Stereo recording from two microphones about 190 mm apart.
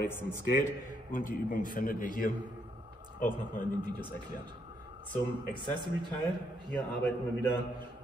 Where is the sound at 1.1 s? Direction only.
45° left (ahead or behind).